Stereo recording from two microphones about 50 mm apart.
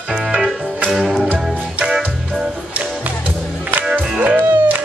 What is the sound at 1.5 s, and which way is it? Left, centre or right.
Music, right.